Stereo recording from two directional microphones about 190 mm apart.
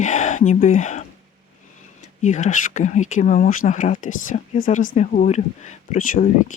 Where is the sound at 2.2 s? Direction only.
40° left (ahead or behind).